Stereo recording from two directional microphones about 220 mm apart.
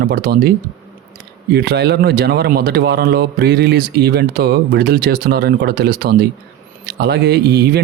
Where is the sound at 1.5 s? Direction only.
50° right (ahead or behind).